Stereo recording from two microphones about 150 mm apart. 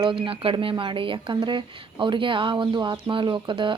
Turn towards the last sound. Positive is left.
turn(degrees=-35)  # may be behind; listen again after turning